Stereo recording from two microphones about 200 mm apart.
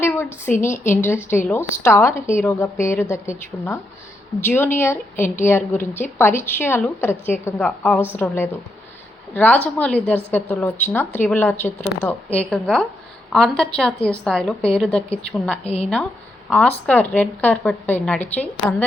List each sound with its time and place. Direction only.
0.0 s a sound: 10° left (ahead or behind)
0.6 s a woman's voice: 10° left (ahead or behind)
15.6 s a woman's voice: 30° left (ahead or behind)
16.5 s a woman's voice: centre (ahead or behind)